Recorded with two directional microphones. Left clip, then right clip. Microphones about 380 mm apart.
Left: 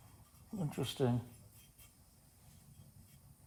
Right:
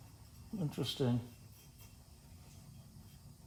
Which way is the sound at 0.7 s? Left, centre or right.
Centre.